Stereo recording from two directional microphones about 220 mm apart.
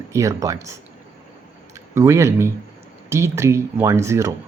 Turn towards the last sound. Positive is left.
turn(degrees=-15)  # may be behind; listen again after turning